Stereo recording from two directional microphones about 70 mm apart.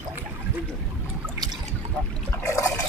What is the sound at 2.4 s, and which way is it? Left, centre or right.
Water, left.